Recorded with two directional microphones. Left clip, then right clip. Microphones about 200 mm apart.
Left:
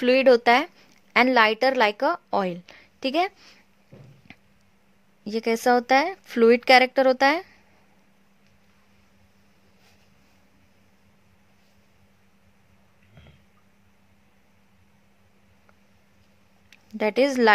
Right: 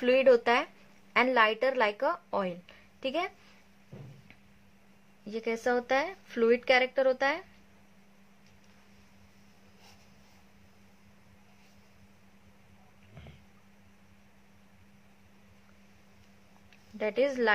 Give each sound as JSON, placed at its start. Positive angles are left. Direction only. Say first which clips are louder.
{"t": 0.0, "sound": "a woman's voice", "louder": "left 6 dB", "side_deg": 45}
{"t": 4.3, "sound": "a sound", "louder": "left 8 dB", "side_deg": 45}
{"t": 5.2, "sound": "a woman's voice", "louder": "left 9 dB", "side_deg": 50}
{"t": 16.7, "sound": "speech", "louder": "left 7 dB", "side_deg": 50}